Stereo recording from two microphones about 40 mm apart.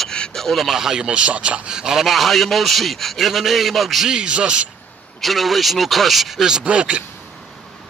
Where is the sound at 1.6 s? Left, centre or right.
Centre.